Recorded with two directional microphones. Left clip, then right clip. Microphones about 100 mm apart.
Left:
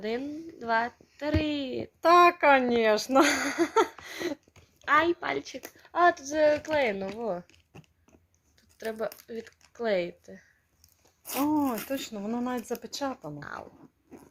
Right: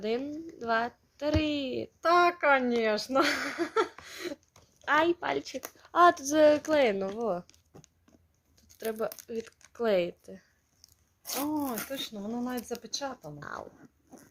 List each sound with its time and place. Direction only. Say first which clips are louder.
0.0 s speech: right 1 dB; 20° right (ahead or behind)
2.0 s speech: left 5 dB; 80° left; by 3.8 s 65° left (ahead or behind)
4.0 s a sound: left 5 dB; 65° left (ahead or behind)
4.9 s a woman's voice: left 2 dB; 25° right (ahead or behind)
5.7 s speech: right 1 dB; 85° right
7.2 s speech: right 1 dB; 45° right (ahead or behind)
8.8 s speech: even; 35° right (ahead or behind)
11.3 s speech: left 5 dB; 50° left (ahead or behind)
13.4 s a woman's voice: even; 25° right (ahead or behind)